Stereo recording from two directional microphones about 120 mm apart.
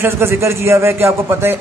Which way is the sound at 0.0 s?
20° right (ahead or behind).